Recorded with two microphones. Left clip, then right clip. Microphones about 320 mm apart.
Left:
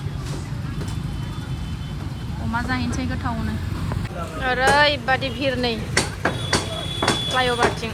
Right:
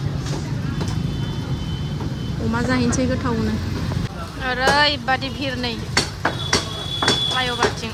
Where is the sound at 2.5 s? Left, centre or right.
Centre.